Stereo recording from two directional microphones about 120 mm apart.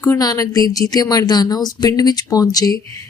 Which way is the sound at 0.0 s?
30° left (ahead or behind).